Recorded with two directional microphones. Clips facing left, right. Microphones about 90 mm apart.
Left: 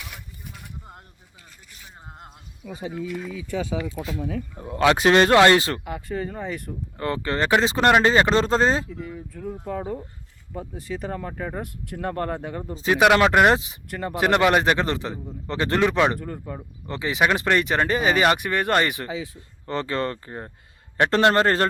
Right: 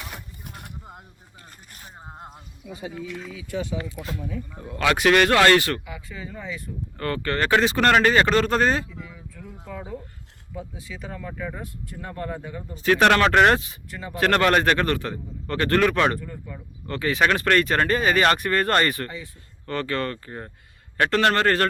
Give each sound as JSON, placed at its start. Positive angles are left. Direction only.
{"t": 0.4, "sound": "a sound", "side_deg": -65}
{"t": 2.0, "sound": "speech", "side_deg": -25}
{"t": 4.6, "sound": "speech", "side_deg": 25}
{"t": 5.8, "sound": "speech", "side_deg": 55}
{"t": 7.0, "sound": "speech", "side_deg": 25}
{"t": 8.9, "sound": "speech", "side_deg": 45}
{"t": 11.6, "sound": "speech", "side_deg": 65}
{"t": 13.0, "sound": "speech", "side_deg": 10}
{"t": 13.9, "sound": "speech", "side_deg": 60}
{"t": 14.2, "sound": "speech", "side_deg": 15}
{"t": 16.2, "sound": "speech", "side_deg": 50}
{"t": 16.8, "sound": "speech", "side_deg": 20}
{"t": 19.0, "sound": "speech", "side_deg": 90}
{"t": 19.6, "sound": "speech", "side_deg": 25}